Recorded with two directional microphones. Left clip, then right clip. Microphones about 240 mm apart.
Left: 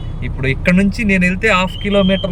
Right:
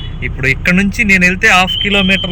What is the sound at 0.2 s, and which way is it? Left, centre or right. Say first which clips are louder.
Speech: right 6 dB; centre.